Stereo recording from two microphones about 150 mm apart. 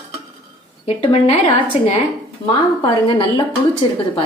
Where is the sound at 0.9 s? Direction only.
40° left (ahead or behind).